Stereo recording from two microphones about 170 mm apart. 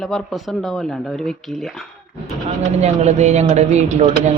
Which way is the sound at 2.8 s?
40° right (ahead or behind).